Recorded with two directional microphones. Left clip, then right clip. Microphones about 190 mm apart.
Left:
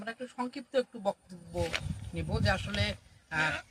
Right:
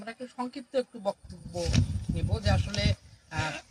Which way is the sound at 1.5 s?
30° right (ahead or behind).